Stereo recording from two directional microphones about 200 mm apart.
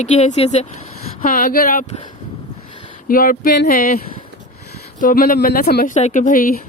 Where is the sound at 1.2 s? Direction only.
45° left (ahead or behind).